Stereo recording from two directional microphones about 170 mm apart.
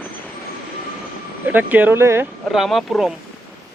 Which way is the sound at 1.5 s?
10° right (ahead or behind).